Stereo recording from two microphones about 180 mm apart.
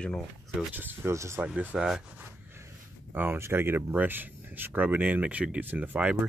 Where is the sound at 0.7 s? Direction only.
10° right (ahead or behind).